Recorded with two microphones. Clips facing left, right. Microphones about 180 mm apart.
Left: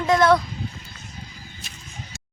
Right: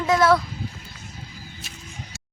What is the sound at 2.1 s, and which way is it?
Music, 5° right (ahead or behind).